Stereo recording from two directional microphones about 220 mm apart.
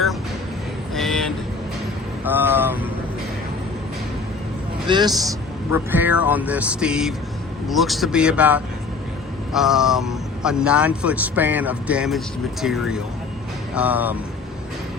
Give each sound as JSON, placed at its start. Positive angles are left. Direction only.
{"t": 0.9, "sound": "vehicle", "side_deg": 0}
{"t": 2.2, "sound": "vehicle", "side_deg": -10}
{"t": 4.9, "sound": "a man's voice", "side_deg": -20}
{"t": 5.7, "sound": "speech", "side_deg": -10}